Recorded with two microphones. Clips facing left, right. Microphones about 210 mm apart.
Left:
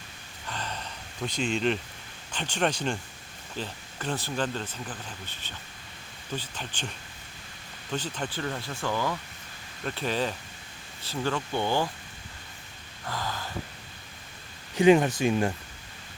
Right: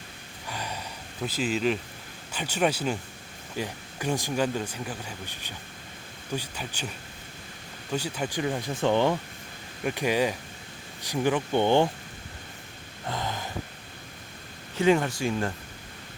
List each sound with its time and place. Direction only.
0.4 s a sound: 10° right (ahead or behind)
2.3 s speech: 10° right (ahead or behind)
7.9 s speech: 10° right (ahead or behind)
9.8 s speech: 15° right (ahead or behind)
13.1 s a sound: 20° right (ahead or behind)
14.8 s speech: 15° left (ahead or behind)